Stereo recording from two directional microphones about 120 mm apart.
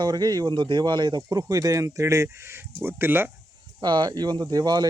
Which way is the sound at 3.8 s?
40° right (ahead or behind).